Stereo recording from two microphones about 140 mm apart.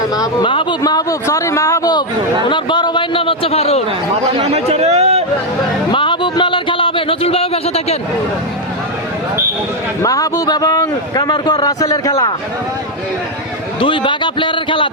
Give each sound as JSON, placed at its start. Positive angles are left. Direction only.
{"t": 0.1, "sound": "a man's voice", "side_deg": 30}
{"t": 4.1, "sound": "a man's voice", "side_deg": -45}
{"t": 5.9, "sound": "a sound", "side_deg": 35}
{"t": 10.0, "sound": "a man's voice", "side_deg": 25}
{"t": 13.7, "sound": "a man's voice", "side_deg": 35}